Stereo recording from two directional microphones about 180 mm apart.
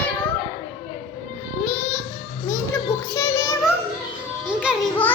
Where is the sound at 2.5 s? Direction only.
15° left (ahead or behind).